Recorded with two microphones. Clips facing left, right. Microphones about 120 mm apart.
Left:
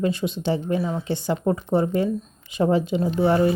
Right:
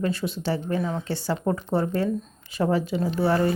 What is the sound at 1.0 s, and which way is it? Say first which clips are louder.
Speech: left 3 dB; 20° left (ahead or behind).